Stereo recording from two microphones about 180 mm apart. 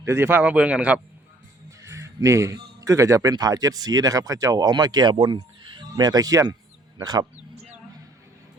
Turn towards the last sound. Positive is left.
turn(degrees=-20)  # may be behind; listen again after turning